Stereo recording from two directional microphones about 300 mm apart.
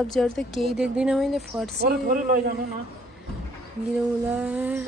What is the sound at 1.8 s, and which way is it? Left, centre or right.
Speech, right.